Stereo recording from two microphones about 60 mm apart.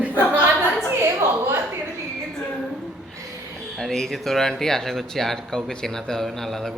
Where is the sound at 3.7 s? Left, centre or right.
Centre.